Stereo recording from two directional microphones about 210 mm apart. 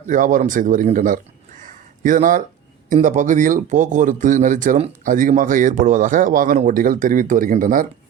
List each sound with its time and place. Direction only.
0.0 s speech: 35° right (ahead or behind)